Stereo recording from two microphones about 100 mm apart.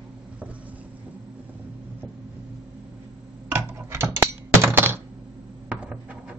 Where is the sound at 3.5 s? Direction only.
25° right (ahead or behind).